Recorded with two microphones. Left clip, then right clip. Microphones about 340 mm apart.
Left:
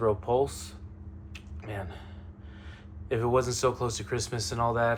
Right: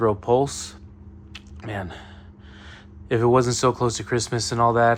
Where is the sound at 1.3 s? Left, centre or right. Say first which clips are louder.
Right 7 dB; right.